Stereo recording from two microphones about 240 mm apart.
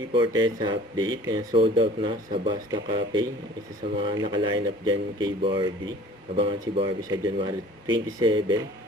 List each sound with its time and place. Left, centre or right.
0.4 s speech: centre